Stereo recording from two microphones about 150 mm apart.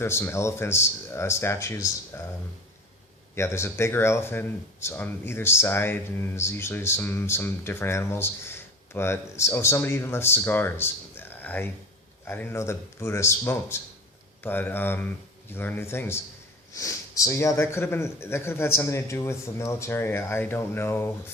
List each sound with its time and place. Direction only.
0.0 s speech: 15° left (ahead or behind)
2.1 s a sound: 15° left (ahead or behind)
3.3 s speech: 15° left (ahead or behind)